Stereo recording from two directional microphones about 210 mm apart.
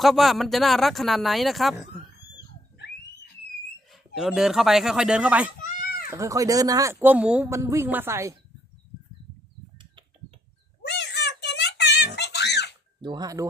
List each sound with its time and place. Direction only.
0.0 s speech: centre (ahead or behind)
3.9 s speech: centre (ahead or behind)
5.6 s a sound: 45° left (ahead or behind)
6.1 s speech: 15° right (ahead or behind)
10.8 s a sound: 55° left (ahead or behind)
13.0 s speech: 20° right (ahead or behind)